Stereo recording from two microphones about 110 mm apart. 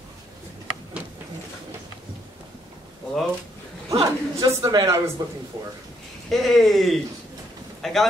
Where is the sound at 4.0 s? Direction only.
25° right (ahead or behind).